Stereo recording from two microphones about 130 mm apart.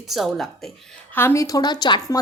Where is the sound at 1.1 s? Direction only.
20° left (ahead or behind).